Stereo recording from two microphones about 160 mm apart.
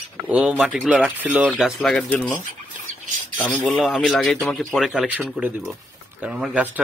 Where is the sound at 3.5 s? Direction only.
10° left (ahead or behind).